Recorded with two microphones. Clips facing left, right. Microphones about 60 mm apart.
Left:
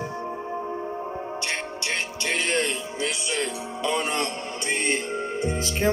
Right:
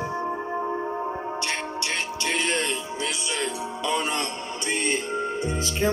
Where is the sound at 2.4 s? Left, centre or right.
Left.